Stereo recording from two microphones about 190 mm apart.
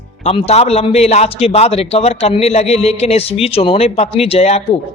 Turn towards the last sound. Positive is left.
turn(degrees=35)  # may be behind; listen again after turning